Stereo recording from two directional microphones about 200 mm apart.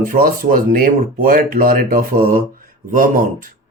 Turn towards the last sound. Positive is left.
turn(degrees=-45)  # may be behind; listen again after turning